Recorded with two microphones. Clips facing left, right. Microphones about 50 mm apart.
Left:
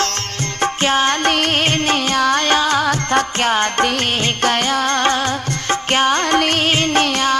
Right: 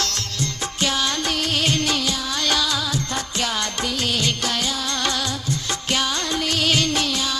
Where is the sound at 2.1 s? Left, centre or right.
Left.